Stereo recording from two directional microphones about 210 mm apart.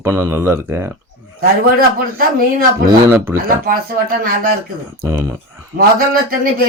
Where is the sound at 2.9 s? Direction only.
10° right (ahead or behind).